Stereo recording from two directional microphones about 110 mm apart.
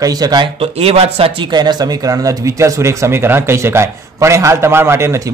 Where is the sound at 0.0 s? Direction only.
35° right (ahead or behind).